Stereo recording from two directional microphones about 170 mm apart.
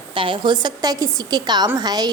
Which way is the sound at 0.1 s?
30° right (ahead or behind).